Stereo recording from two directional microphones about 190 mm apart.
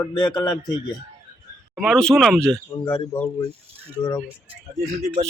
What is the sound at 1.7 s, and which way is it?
Speech, centre (ahead or behind).